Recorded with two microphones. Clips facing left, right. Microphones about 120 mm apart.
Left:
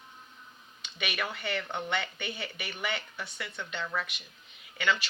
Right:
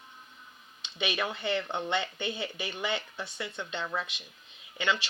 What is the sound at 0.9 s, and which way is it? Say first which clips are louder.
A woman's voice: right 3 dB; 25° right (ahead or behind).